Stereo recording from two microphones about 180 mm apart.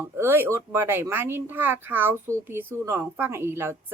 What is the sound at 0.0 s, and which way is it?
A woman's voice, 15° right (ahead or behind).